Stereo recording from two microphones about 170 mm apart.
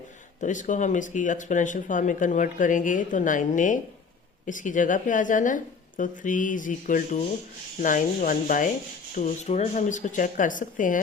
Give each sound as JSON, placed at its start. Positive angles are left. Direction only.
{"t": 0.4, "sound": "speech", "side_deg": 50}